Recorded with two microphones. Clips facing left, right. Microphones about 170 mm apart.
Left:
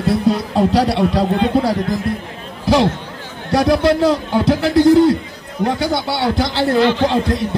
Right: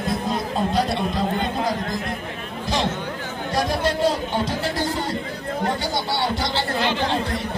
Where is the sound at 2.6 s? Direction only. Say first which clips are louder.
Left 10 dB; 70° left (ahead or behind).